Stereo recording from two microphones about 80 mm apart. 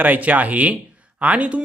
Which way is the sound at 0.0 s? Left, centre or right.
Right.